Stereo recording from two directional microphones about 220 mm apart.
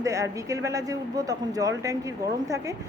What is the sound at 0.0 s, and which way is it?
Speech, 15° right (ahead or behind).